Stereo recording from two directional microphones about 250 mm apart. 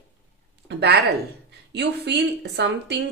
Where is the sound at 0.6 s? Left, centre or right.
Right.